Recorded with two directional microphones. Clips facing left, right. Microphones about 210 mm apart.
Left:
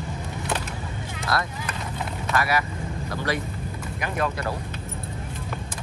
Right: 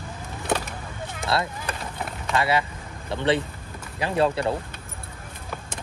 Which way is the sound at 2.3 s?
25° right (ahead or behind).